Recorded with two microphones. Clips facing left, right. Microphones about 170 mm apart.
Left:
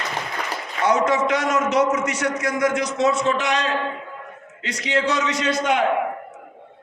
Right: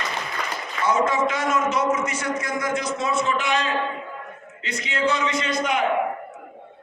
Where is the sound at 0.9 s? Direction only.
75° left (ahead or behind).